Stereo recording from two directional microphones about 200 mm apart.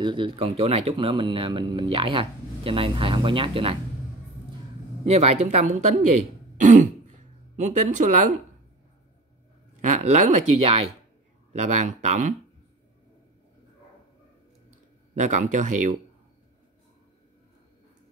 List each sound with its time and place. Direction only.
0.0 s speech: 25° right (ahead or behind)
5.0 s speech: 30° right (ahead or behind)
6.6 s throat clearing: 40° right (ahead or behind)
9.8 s speech: 40° right (ahead or behind)
14.7 s speech: 40° right (ahead or behind)